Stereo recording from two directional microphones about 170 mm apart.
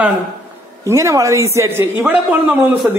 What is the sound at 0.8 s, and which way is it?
Speech, 15° right (ahead or behind).